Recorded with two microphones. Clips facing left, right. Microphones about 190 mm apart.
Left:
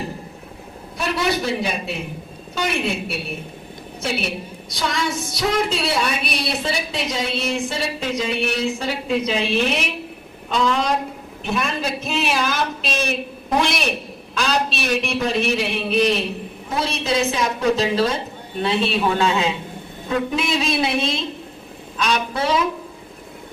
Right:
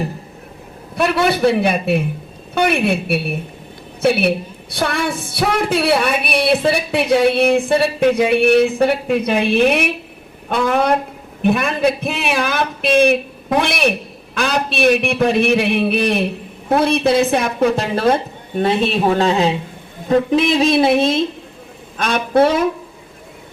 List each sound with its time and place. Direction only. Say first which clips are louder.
0.9 s a woman's voice: right 6 dB; 60° right (ahead or behind)